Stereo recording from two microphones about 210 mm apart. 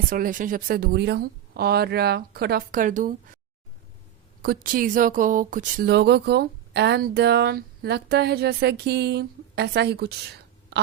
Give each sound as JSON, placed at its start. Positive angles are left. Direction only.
{"t": 0.1, "sound": "speech", "side_deg": -40}
{"t": 4.4, "sound": "speech", "side_deg": -40}